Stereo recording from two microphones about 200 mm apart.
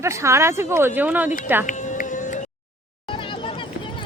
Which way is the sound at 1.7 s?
40° left (ahead or behind).